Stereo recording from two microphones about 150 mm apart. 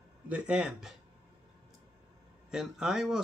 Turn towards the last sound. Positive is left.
turn(degrees=-5)  # may be behind; listen again after turning